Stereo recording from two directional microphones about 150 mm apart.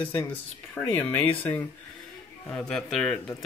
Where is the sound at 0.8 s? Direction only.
20° left (ahead or behind).